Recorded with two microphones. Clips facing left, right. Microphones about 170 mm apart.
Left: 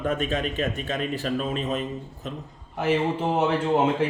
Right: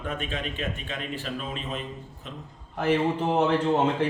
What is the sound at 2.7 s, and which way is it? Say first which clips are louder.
A man's voice: even; 5° left (ahead or behind).